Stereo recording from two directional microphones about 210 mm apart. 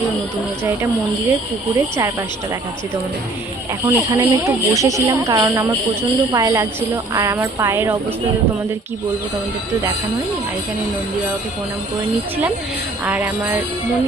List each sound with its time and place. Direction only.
3.8 s speech: 15° right (ahead or behind)
13.1 s speech: 10° right (ahead or behind)